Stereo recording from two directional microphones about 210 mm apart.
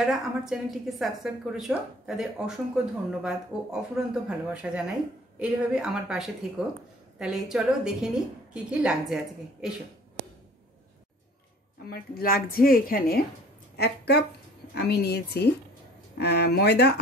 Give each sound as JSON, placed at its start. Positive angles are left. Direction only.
{"t": 0.0, "sound": "a woman's voice", "side_deg": 0}
{"t": 11.9, "sound": "a woman's voice", "side_deg": 45}